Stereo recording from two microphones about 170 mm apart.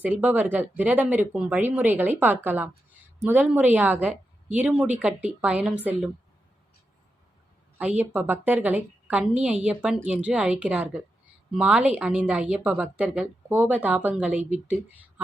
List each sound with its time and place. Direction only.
0.0 s a woman's voice: 10° right (ahead or behind)
7.8 s a woman's voice: 10° right (ahead or behind)